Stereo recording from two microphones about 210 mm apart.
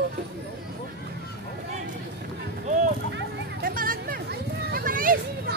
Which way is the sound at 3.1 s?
45° right (ahead or behind).